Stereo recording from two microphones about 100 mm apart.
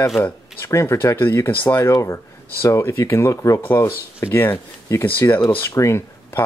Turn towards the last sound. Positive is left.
turn(degrees=30)  # may be behind; listen again after turning